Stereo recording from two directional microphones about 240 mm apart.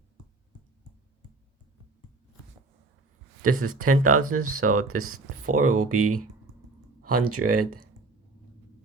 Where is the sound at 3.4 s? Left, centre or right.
Right.